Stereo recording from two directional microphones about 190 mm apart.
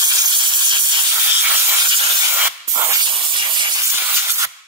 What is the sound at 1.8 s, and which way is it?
Rub, 25° right (ahead or behind).